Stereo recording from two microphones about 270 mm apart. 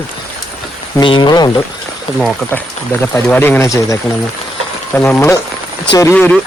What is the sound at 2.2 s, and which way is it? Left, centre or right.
Speech, centre.